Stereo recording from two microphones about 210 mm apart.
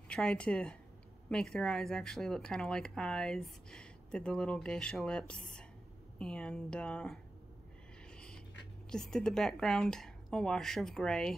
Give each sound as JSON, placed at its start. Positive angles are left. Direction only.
{"t": 0.1, "sound": "speech", "side_deg": 5}
{"t": 8.9, "sound": "speech", "side_deg": 5}